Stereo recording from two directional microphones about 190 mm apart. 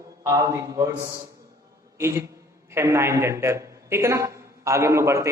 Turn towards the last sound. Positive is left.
turn(degrees=-15)  # may be behind; listen again after turning